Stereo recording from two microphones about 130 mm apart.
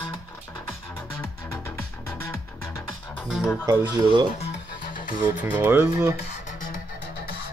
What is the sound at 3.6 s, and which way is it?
Speech, 30° right (ahead or behind).